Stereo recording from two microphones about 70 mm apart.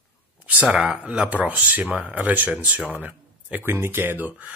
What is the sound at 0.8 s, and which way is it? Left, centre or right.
Speech, centre.